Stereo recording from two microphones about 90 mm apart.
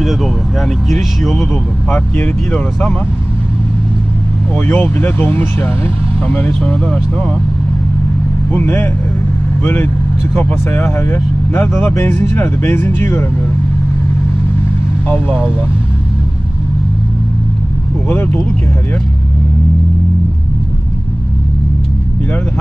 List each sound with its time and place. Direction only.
0.0 s speech: centre (ahead or behind)
1.9 s speech: 20° left (ahead or behind)
4.6 s speech: 25° left (ahead or behind)
8.5 s speech: 20° left (ahead or behind)
15.0 s speech: 20° left (ahead or behind)
18.0 s speech: 20° left (ahead or behind)